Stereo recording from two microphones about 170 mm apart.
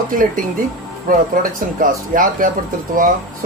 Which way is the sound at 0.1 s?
55° right (ahead or behind).